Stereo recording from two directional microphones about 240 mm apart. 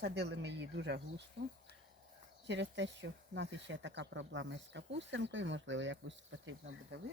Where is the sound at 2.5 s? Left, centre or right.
Right.